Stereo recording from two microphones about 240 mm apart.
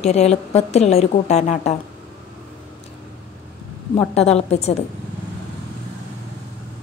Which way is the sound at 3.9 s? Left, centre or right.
Left.